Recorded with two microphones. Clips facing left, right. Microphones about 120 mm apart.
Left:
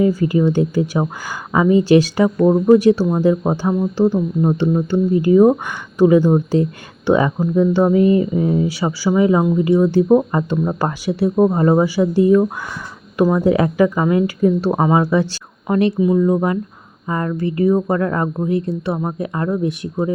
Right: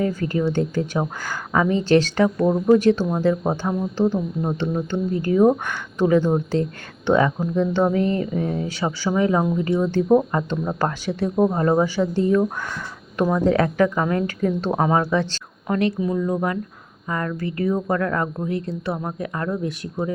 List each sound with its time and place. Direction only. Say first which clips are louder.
0.0 s a woman's voice: left 7 dB; 10° left (ahead or behind)